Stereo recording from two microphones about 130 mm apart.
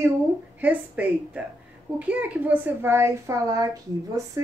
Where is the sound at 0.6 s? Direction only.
10° right (ahead or behind).